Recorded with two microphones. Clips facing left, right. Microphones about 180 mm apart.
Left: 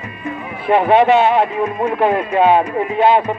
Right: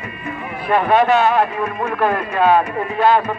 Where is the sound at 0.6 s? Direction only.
25° left (ahead or behind).